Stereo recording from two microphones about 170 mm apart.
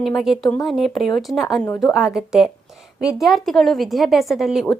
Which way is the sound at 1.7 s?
20° left (ahead or behind).